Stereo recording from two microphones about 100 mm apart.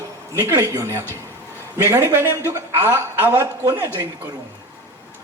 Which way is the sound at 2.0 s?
25° right (ahead or behind).